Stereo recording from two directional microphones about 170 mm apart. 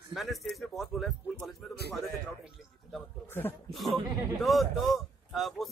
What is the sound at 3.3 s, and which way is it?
Speech, 10° left (ahead or behind).